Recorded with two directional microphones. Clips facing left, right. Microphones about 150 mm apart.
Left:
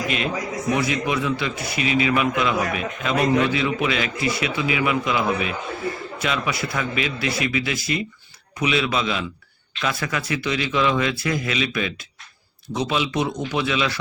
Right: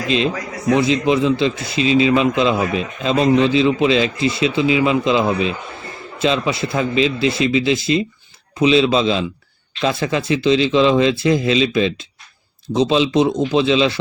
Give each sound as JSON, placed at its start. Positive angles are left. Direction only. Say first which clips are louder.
{"t": 0.7, "sound": "a man's voice", "louder": "right 8 dB", "side_deg": -25}